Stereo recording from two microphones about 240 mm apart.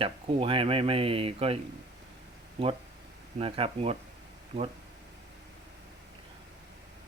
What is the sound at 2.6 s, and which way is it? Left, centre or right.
Speech, right.